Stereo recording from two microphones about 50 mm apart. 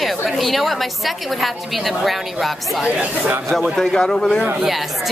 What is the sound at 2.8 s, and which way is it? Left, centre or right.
Speech, right.